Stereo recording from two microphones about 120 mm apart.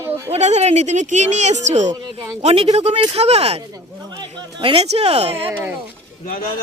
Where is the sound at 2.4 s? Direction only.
65° right (ahead or behind).